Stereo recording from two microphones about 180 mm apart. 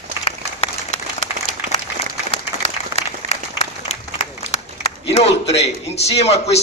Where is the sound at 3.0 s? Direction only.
40° left (ahead or behind).